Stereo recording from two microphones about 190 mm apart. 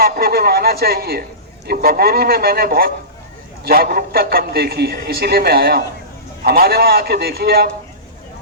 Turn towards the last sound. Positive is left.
turn(degrees=-55)  # may be behind; listen again after turning